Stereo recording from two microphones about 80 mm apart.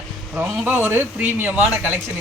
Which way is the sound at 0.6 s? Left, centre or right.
Centre.